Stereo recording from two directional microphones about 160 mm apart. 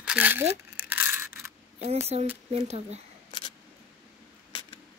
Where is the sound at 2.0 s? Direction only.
40° right (ahead or behind).